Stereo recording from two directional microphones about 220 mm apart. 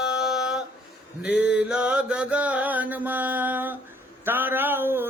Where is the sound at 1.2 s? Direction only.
5° right (ahead or behind).